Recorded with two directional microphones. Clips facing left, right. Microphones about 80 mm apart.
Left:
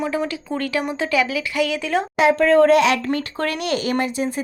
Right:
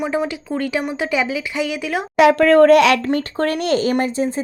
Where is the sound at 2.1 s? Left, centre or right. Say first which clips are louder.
Right 4 dB; right.